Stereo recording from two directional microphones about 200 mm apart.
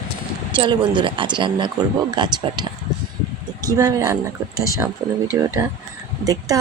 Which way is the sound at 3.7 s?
15° right (ahead or behind).